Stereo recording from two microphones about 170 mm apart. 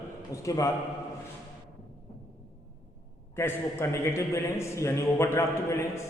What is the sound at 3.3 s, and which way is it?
A man's voice, 15° left (ahead or behind).